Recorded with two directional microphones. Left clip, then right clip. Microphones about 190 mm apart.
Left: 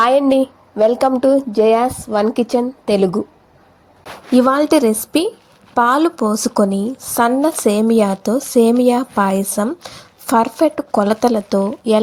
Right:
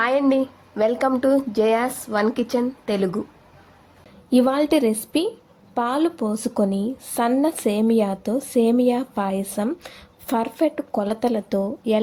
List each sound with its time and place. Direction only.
0.0 s speech: 20° left (ahead or behind)
4.3 s a woman's voice: 15° left (ahead or behind)